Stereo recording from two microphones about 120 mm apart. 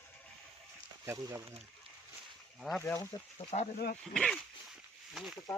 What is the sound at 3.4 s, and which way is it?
Speech, 70° left (ahead or behind).